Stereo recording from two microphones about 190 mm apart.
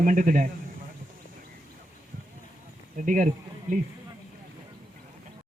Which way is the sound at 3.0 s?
45° right (ahead or behind).